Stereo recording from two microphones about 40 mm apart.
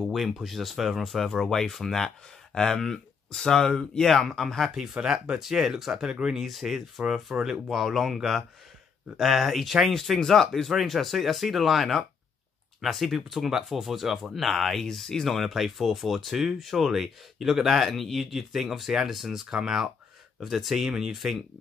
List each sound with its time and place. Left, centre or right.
0.0 s speech: centre
4.7 s speech: centre
5.4 s speech: centre
6.3 s speech: centre
15.3 s speech: centre